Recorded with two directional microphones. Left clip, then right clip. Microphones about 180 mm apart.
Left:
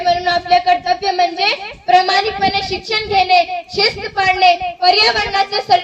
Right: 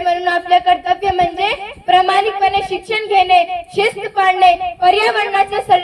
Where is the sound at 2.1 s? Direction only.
15° right (ahead or behind).